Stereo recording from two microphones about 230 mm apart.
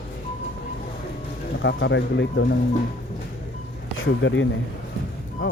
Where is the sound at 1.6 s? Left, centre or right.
Left.